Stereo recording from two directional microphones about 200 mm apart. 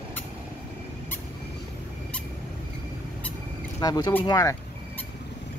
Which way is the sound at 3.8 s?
20° left (ahead or behind).